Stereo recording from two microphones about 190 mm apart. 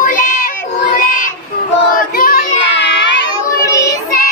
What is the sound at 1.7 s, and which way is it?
Child singing, 50° left (ahead or behind).